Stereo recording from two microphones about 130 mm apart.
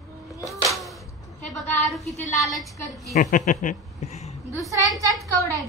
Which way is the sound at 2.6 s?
Centre (ahead or behind).